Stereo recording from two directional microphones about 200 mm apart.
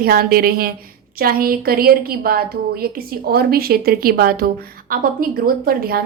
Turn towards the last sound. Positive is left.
turn(degrees=-50)  # may be behind; listen again after turning